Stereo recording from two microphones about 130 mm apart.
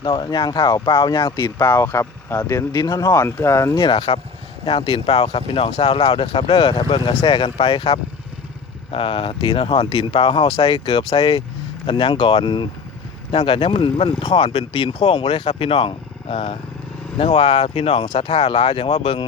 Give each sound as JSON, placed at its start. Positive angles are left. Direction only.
{"t": 0.0, "sound": "speech", "side_deg": 35}
{"t": 1.4, "sound": "speech", "side_deg": 20}
{"t": 3.8, "sound": "speech", "side_deg": 40}
{"t": 7.3, "sound": "speech", "side_deg": 40}
{"t": 14.3, "sound": "speech", "side_deg": 55}
{"t": 14.8, "sound": "speech", "side_deg": 35}
{"t": 15.0, "sound": "speech", "side_deg": 50}
{"t": 18.0, "sound": "speech", "side_deg": 40}
{"t": 18.3, "sound": "speech", "side_deg": 50}